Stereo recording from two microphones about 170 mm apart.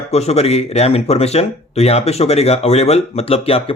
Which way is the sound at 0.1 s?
40° left (ahead or behind).